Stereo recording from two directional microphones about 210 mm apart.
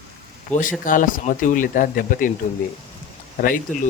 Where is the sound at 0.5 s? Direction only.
40° left (ahead or behind).